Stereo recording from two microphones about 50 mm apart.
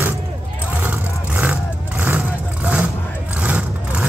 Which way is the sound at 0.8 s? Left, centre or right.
Right.